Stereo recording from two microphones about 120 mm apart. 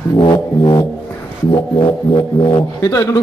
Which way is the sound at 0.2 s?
35° left (ahead or behind).